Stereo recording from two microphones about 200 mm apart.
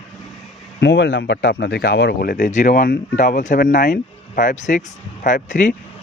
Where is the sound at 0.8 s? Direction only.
65° left (ahead or behind).